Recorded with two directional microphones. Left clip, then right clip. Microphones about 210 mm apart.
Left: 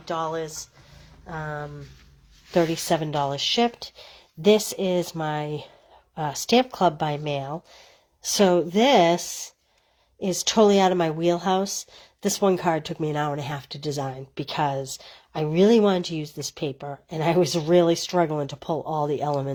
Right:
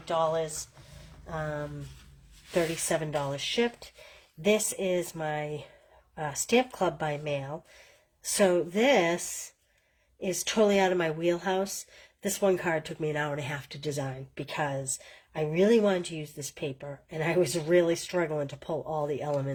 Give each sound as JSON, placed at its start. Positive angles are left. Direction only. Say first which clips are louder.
{"t": 0.0, "sound": "speech", "louder": "even", "side_deg": 30}